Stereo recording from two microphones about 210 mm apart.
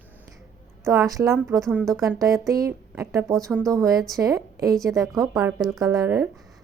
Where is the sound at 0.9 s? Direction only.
15° right (ahead or behind).